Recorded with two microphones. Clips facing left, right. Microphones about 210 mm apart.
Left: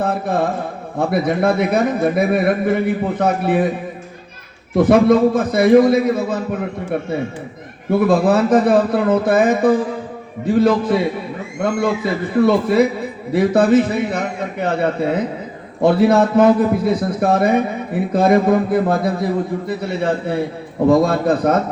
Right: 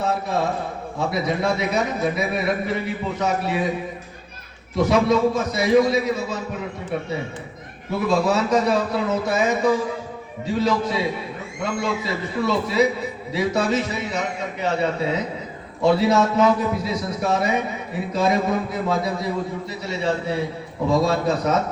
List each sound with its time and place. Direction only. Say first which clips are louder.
0.0 s a sound: left 4 dB; 55° left (ahead or behind)
0.9 s a man's voice: left 6 dB; 55° left (ahead or behind)
4.7 s a man's voice: left 7 dB; 55° left (ahead or behind)